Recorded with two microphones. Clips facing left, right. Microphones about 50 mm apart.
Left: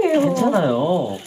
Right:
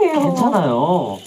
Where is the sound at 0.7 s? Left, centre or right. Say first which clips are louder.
Right 2 dB; centre.